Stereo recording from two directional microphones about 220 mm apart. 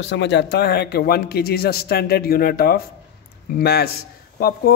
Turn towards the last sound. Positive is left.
turn(degrees=45)  # may be behind; listen again after turning